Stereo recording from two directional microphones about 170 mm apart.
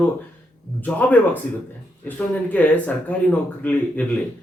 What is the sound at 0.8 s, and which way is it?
Speech, 10° left (ahead or behind).